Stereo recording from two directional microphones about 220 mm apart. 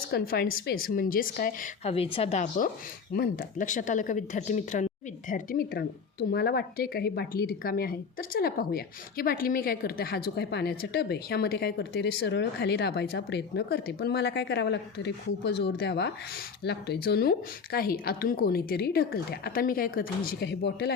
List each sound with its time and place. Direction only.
0.1 s a woman's voice: 45° left (ahead or behind)
1.8 s a woman's voice: 25° left (ahead or behind); by 20.9 s 50° left (ahead or behind)